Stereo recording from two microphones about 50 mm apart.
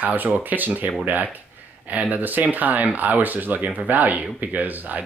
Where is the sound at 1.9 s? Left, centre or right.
Right.